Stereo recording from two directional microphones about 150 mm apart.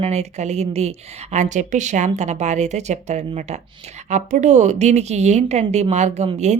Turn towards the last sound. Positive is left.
turn(degrees=-50)  # may be behind; listen again after turning